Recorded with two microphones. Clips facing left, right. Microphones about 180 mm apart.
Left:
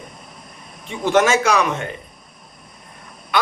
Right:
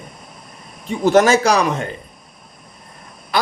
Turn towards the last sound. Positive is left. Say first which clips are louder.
# right 1 dB
turn(degrees=-35)  # may be behind; listen again after turning